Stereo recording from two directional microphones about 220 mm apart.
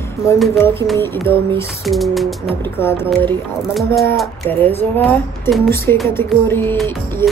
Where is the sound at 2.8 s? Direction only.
10° left (ahead or behind).